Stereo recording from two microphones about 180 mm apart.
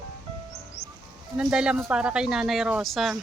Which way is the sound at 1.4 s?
5° right (ahead or behind).